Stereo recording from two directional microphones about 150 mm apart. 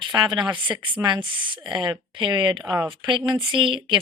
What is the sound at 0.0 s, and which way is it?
Speech, 30° right (ahead or behind).